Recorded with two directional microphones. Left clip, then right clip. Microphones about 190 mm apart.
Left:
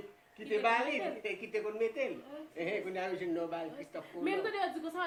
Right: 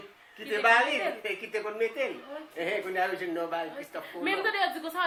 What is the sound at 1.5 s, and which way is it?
Speech, 5° left (ahead or behind).